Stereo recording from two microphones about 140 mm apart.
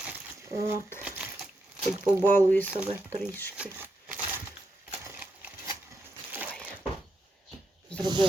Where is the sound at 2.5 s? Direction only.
10° left (ahead or behind).